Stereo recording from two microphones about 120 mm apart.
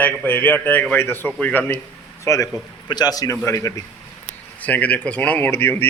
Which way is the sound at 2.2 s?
25° left (ahead or behind).